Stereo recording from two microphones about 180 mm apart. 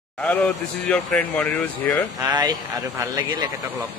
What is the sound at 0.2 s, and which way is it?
Speech, 10° left (ahead or behind).